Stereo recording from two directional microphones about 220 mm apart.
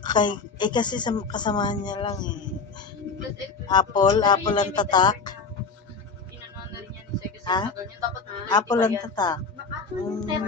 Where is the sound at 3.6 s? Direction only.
20° left (ahead or behind).